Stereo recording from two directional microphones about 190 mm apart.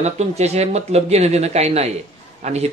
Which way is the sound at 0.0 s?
35° right (ahead or behind).